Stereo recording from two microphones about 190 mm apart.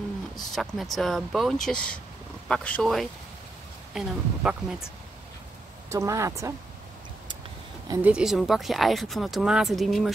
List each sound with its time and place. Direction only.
0.4 s speech: centre (ahead or behind)
5.9 s speech: 15° right (ahead or behind)
8.0 s speech: 5° right (ahead or behind)